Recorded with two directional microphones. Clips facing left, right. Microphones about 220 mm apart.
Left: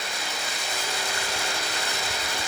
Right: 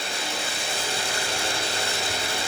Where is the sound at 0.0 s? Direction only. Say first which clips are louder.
Right 3 dB; 30° right (ahead or behind).